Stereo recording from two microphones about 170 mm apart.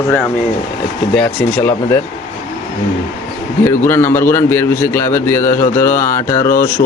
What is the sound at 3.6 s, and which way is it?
A man's voice, 15° left (ahead or behind).